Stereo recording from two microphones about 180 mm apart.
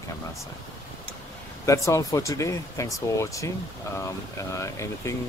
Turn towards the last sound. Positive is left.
turn(degrees=15)  # may be behind; listen again after turning